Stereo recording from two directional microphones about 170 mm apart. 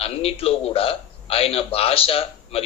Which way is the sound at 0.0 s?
35° left (ahead or behind).